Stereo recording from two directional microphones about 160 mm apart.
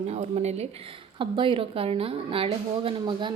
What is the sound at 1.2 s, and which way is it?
A woman's voice, 30° right (ahead or behind).